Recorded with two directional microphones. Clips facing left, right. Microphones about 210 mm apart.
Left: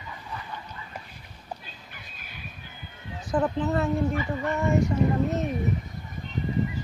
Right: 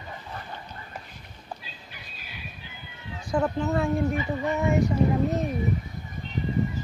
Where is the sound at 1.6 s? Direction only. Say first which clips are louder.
Right 1 dB; 50° left (ahead or behind).